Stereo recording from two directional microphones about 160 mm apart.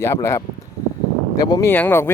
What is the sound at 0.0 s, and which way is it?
Speech, 15° left (ahead or behind).